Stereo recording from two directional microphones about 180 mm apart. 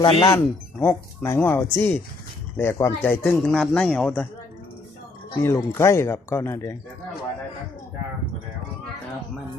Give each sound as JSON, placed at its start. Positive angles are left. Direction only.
{"t": 0.0, "sound": "speech", "side_deg": 25}
{"t": 0.3, "sound": "speech", "side_deg": 15}
{"t": 5.4, "sound": "speech", "side_deg": 15}